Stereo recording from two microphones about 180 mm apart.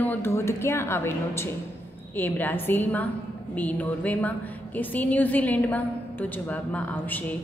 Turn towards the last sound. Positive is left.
turn(degrees=10)  # may be behind; listen again after turning